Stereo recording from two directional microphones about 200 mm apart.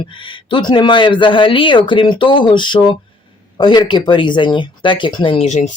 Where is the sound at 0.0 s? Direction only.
25° left (ahead or behind).